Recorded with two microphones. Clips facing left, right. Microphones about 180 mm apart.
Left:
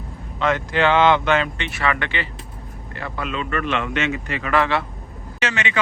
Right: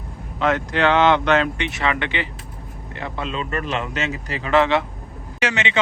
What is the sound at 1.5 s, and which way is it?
A man's voice, 15° right (ahead or behind).